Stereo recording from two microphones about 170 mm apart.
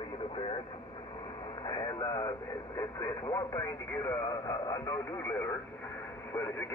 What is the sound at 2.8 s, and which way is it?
Speech, 20° left (ahead or behind).